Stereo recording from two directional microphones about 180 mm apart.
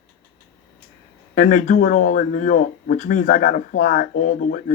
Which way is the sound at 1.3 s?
45° left (ahead or behind).